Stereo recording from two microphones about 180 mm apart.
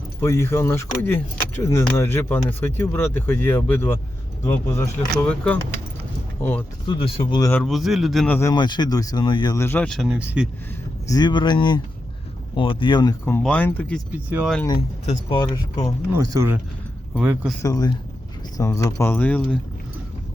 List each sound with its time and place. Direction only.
0.2 s speech: 15° left (ahead or behind)
6.8 s speech: 25° left (ahead or behind)
7.5 s speech: centre (ahead or behind)
8.4 s speech: 20° left (ahead or behind); by 10.5 s 5° right (ahead or behind)
11.1 s speech: 25° left (ahead or behind)
13.2 s speech: 10° left (ahead or behind)
14.1 s speech: 10° right (ahead or behind)
14.7 s speech: 30° left (ahead or behind)
16.1 s speech: 15° right (ahead or behind)
17.2 s speech: 5° right (ahead or behind)
17.6 s speech: 20° left (ahead or behind)